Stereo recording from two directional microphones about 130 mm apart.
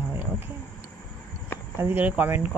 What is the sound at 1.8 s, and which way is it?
Speech, 15° right (ahead or behind).